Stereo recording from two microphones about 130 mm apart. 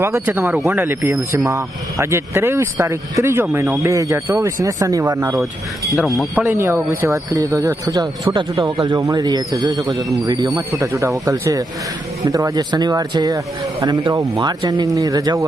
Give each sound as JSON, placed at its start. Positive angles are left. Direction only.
{"t": 0.0, "sound": "speech", "side_deg": -15}